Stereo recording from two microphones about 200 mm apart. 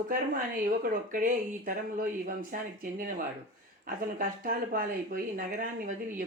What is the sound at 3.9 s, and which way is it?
Speech, 45° right (ahead or behind).